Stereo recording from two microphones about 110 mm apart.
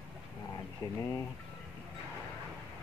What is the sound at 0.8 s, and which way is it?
Speech, 35° left (ahead or behind).